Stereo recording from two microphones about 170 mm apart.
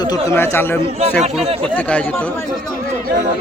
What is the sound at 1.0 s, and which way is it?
Speech, 40° right (ahead or behind).